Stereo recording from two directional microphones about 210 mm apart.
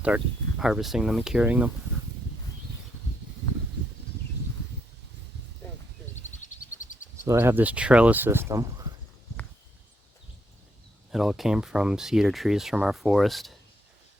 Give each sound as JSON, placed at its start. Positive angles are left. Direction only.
{"t": 0.6, "sound": "speech", "side_deg": 0}
{"t": 6.2, "sound": "a sound", "side_deg": 35}
{"t": 7.3, "sound": "speech", "side_deg": -10}
{"t": 11.1, "sound": "speech", "side_deg": 0}